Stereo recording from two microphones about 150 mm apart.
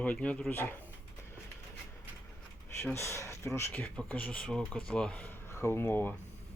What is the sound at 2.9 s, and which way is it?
Speech, 20° left (ahead or behind).